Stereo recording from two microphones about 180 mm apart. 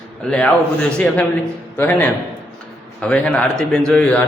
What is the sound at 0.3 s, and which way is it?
A man's voice, 5° left (ahead or behind).